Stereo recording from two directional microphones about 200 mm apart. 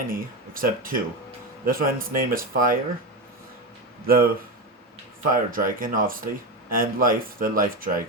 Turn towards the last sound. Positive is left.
turn(degrees=-45)  # may be behind; listen again after turning